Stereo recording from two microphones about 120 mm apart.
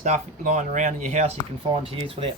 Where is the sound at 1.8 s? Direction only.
50° right (ahead or behind).